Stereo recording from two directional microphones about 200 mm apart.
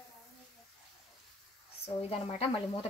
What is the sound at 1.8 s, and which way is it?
Speech, 30° left (ahead or behind).